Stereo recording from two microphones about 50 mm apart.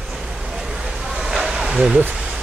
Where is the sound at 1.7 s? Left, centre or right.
Right.